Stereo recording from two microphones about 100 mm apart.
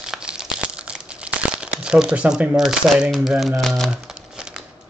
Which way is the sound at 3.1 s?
Centre (ahead or behind).